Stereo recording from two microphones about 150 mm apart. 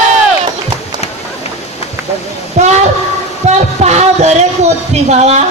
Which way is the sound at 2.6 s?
50° right (ahead or behind).